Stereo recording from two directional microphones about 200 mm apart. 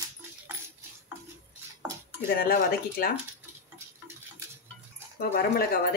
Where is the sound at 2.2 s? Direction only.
50° left (ahead or behind).